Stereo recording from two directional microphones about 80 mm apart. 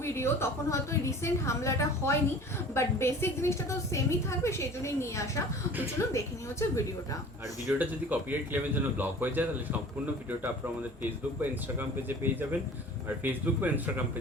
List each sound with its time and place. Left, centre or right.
0.0 s a woman's voice: left
7.7 s a man's voice: centre
11.3 s a man's voice: right